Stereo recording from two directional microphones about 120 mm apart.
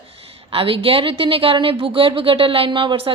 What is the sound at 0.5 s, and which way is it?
A woman's voice, 50° right (ahead or behind).